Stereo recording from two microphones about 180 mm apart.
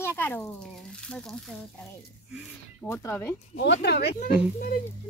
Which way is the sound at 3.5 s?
70° left (ahead or behind).